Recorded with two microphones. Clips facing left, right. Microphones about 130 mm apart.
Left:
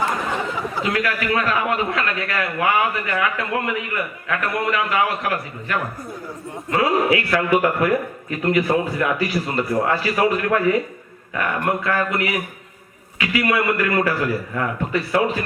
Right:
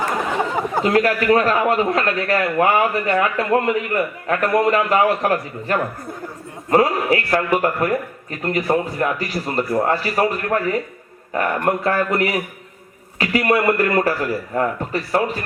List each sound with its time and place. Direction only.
0.5 s a man's voice: 50° right (ahead or behind)